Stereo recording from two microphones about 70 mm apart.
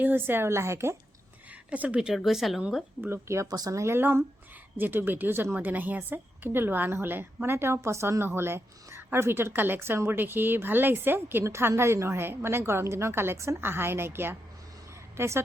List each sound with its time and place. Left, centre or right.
0.0 s a woman's voice: right
1.7 s speech: right
2.0 s speech: centre
3.0 s a woman's voice: right
3.9 s a woman's voice: right